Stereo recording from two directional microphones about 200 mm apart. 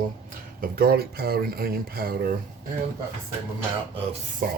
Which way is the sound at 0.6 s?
50° right (ahead or behind).